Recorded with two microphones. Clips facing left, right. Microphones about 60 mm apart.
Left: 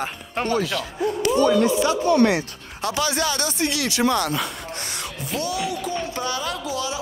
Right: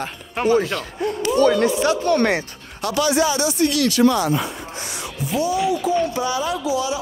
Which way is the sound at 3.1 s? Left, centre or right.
Left.